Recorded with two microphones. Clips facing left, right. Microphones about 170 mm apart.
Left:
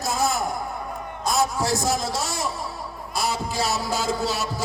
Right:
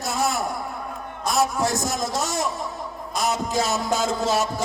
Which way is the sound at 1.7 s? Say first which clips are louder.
Left 2 dB; 30° left (ahead or behind).